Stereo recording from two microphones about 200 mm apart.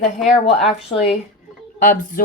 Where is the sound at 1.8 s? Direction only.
40° left (ahead or behind).